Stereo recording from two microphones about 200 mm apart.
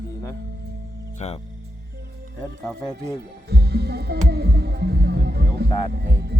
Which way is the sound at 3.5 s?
55° right (ahead or behind).